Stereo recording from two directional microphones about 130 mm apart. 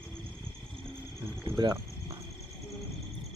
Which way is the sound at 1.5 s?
35° right (ahead or behind).